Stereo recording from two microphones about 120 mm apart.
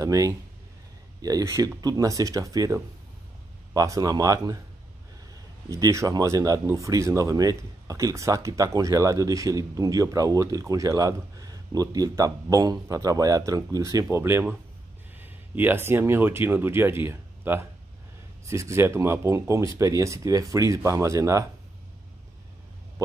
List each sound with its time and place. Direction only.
0.0 s speech: 30° right (ahead or behind)
5.7 s speech: 25° right (ahead or behind)